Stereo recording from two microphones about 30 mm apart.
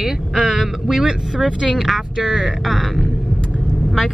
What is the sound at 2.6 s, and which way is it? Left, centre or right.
Speech, centre.